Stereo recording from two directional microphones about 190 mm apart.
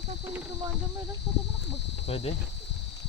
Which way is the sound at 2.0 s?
30° left (ahead or behind).